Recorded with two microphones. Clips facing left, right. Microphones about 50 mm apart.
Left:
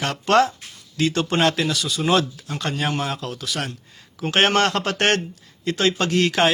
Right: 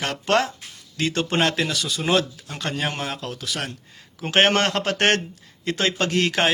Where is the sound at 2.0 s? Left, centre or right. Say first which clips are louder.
Left 2 dB; centre.